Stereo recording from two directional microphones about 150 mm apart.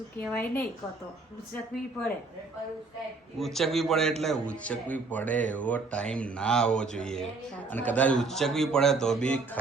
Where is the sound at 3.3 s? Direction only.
Centre (ahead or behind).